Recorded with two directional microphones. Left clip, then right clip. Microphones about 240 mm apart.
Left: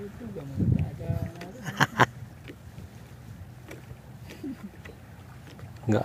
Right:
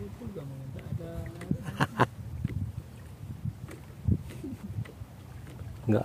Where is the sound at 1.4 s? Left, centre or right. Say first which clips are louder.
Left 5 dB; centre.